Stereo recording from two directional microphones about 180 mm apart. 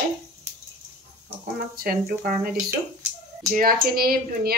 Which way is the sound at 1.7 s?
55° right (ahead or behind).